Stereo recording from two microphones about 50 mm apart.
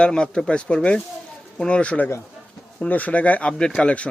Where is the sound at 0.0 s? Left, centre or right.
Centre.